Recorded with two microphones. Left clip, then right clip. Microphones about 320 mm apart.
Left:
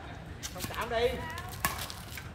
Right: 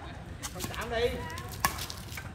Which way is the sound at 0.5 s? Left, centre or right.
Centre.